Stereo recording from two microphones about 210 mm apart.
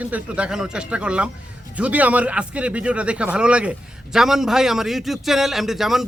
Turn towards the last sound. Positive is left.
turn(degrees=0)  # may be behind; listen again after turning